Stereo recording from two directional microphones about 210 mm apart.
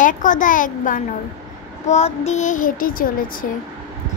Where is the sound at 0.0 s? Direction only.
40° left (ahead or behind).